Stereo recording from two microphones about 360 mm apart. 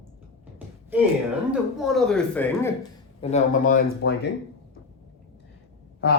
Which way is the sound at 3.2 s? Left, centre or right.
Centre.